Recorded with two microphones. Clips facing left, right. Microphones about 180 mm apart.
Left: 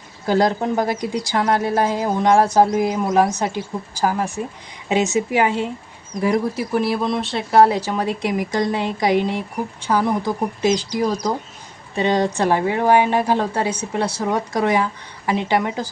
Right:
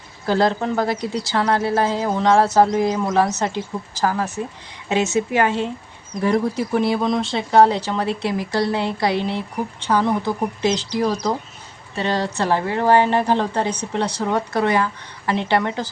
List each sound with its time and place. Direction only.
0.3 s a woman's voice: 15° left (ahead or behind)